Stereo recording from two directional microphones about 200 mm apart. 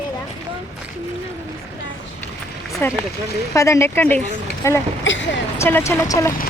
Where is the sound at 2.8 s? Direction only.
10° left (ahead or behind).